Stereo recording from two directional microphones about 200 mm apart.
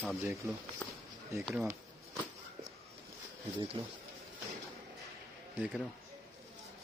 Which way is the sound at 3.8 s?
25° right (ahead or behind).